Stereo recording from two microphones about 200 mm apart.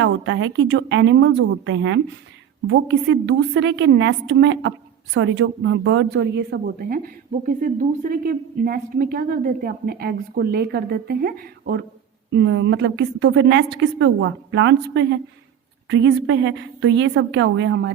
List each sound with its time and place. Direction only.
0.0 s a woman's voice: 70° right (ahead or behind); by 11.9 s 55° right (ahead or behind)
12.3 s a woman's voice: 65° right (ahead or behind)